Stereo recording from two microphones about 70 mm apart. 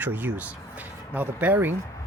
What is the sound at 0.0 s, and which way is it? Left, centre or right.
Speech, right.